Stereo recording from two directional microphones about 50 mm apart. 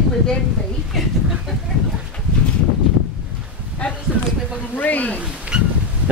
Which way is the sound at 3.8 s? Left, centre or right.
Left.